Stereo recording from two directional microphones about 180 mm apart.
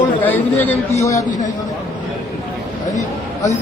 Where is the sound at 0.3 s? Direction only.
15° left (ahead or behind).